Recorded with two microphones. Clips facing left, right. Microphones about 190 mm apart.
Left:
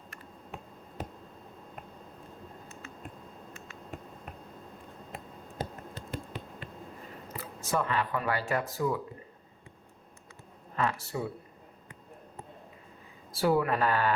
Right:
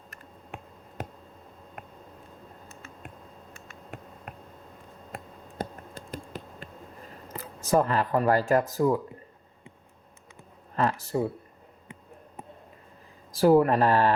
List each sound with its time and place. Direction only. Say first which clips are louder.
5.1 s finger snapping: right 3 dB; 50° right (ahead or behind)
7.3 s speech: right 8 dB; 40° right (ahead or behind)
10.8 s a sound: right 5 dB; 40° right (ahead or behind)
13.4 s speech: right 7 dB; 40° right (ahead or behind)